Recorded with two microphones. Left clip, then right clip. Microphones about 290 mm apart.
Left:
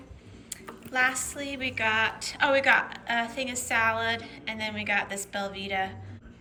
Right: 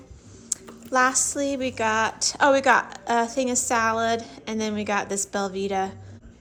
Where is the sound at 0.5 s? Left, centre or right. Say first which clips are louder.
Right 6 dB; centre.